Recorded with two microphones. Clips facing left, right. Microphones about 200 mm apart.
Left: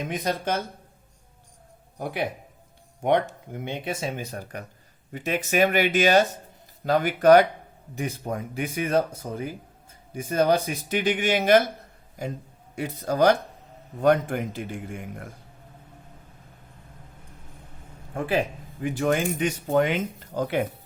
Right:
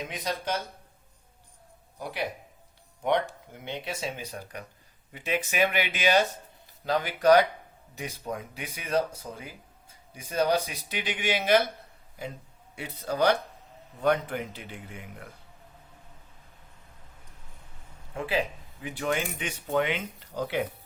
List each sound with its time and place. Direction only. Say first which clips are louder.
0.0 s speech: left 5 dB; 50° left (ahead or behind)
2.0 s speech: left 4 dB; 55° left (ahead or behind)
12.7 s speech: left 5 dB; 45° left (ahead or behind)
18.1 s speech: left 4 dB; 50° left (ahead or behind)